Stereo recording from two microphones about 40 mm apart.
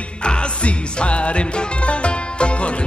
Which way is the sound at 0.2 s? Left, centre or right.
Left.